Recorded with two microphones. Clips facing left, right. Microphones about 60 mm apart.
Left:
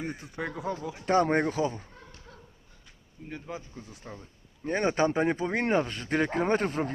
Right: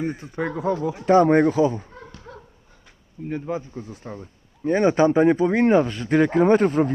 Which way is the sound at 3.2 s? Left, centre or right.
Right.